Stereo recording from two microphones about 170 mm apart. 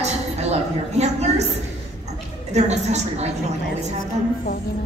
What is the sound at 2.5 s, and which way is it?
Speech, 40° right (ahead or behind).